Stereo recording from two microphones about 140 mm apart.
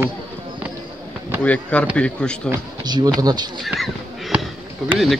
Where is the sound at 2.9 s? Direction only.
30° right (ahead or behind).